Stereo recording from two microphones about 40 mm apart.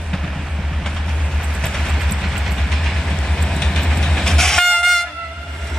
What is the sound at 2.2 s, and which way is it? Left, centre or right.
Train, centre.